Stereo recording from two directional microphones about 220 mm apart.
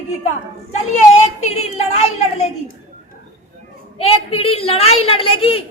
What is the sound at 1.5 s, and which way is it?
Speech, 30° left (ahead or behind).